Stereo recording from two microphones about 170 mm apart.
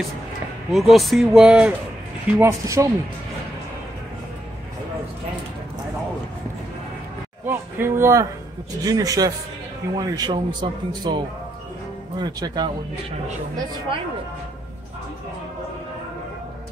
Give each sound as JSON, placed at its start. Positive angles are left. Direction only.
{"t": 0.7, "sound": "speech", "side_deg": 0}
{"t": 2.3, "sound": "speech", "side_deg": -15}
{"t": 7.4, "sound": "speech", "side_deg": -15}